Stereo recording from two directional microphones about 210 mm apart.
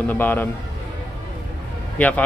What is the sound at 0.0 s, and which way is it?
Speech, 10° left (ahead or behind).